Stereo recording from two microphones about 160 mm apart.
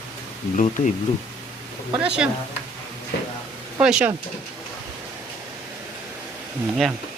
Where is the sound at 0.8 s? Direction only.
55° left (ahead or behind).